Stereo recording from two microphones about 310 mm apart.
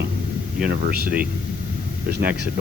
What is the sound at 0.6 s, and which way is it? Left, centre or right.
Speech, right.